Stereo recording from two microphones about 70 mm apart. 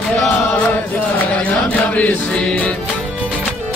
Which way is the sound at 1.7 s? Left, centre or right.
Left.